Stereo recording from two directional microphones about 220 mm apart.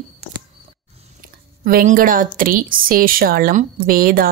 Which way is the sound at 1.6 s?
40° right (ahead or behind).